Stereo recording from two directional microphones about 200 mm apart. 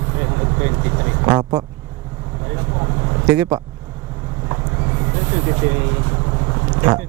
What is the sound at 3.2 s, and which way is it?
Speech, 10° right (ahead or behind).